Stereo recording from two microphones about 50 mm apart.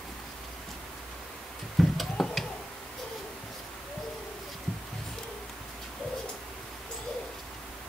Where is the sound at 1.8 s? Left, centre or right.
Centre.